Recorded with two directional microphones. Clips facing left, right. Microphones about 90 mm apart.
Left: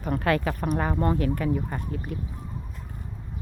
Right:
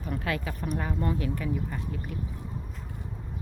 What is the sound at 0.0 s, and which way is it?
Speech, 55° left (ahead or behind).